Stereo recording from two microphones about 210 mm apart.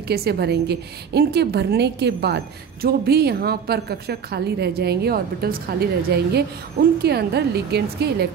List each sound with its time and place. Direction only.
0.1 s a woman's voice: 50° right (ahead or behind)